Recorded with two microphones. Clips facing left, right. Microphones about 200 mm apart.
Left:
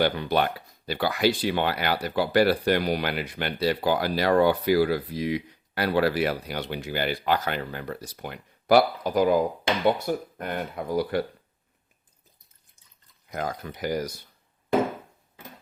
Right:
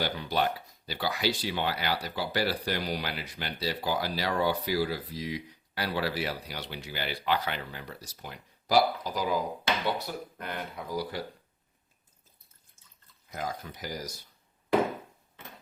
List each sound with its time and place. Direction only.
0.0 s speech: 60° left (ahead or behind)
13.3 s speech: 60° left (ahead or behind)